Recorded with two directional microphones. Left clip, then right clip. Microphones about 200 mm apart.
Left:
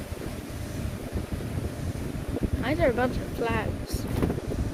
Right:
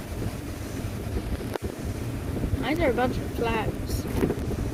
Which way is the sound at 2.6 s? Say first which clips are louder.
Even; 15° left (ahead or behind).